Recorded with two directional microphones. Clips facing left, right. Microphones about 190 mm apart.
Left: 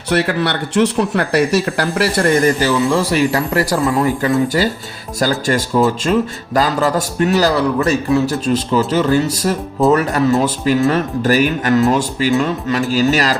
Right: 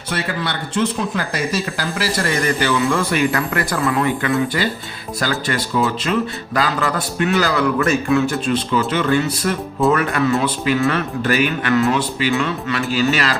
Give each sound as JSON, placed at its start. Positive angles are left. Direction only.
{"t": 0.1, "sound": "a man's voice", "side_deg": 65}